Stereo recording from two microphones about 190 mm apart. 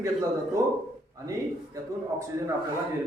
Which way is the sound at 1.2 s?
15° right (ahead or behind).